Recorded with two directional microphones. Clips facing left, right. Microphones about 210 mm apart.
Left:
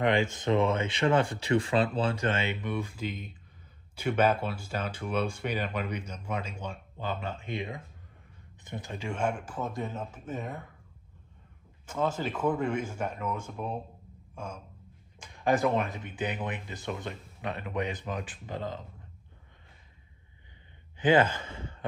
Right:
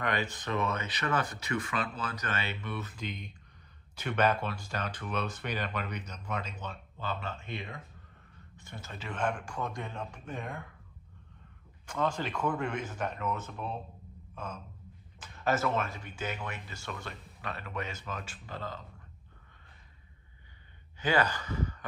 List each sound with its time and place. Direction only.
0.0 s speech: 25° left (ahead or behind)
2.6 s speech: 15° left (ahead or behind)
11.8 s speech: 5° left (ahead or behind)
14.3 s gasp: 10° left (ahead or behind)
15.1 s speech: 15° left (ahead or behind)
21.0 s speech: 20° left (ahead or behind)